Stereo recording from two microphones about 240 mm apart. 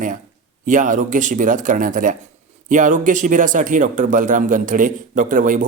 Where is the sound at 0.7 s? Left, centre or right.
Right.